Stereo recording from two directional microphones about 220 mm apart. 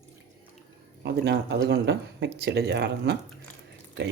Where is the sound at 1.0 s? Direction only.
50° right (ahead or behind).